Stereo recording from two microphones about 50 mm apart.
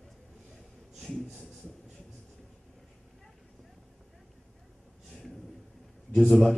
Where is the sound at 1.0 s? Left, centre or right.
Centre.